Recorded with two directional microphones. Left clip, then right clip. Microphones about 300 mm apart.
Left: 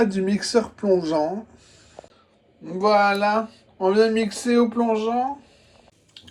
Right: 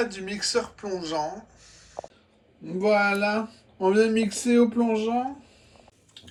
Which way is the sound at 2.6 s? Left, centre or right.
Centre.